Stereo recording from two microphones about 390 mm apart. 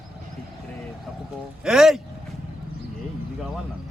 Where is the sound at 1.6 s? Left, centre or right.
Centre.